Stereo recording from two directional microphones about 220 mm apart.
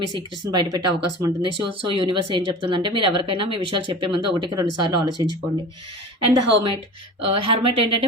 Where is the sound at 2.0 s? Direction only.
25° right (ahead or behind).